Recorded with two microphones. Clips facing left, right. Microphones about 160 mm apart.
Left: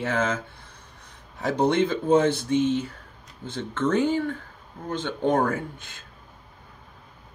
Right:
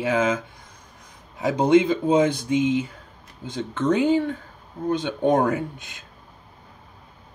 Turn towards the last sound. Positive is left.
turn(degrees=-15)  # may be behind; listen again after turning